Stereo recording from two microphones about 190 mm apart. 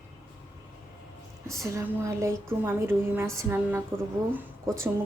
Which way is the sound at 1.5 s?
15° right (ahead or behind).